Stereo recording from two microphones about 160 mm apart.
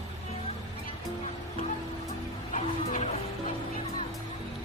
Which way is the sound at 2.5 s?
40° left (ahead or behind).